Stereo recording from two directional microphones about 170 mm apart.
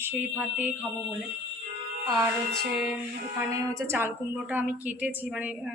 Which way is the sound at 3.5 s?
15° right (ahead or behind).